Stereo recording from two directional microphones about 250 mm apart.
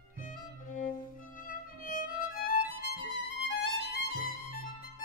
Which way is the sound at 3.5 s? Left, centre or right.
Left.